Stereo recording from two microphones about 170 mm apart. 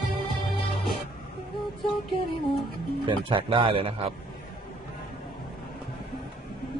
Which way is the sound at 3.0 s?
30° right (ahead or behind).